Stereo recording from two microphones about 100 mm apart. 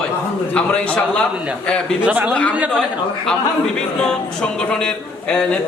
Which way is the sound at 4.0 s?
10° left (ahead or behind).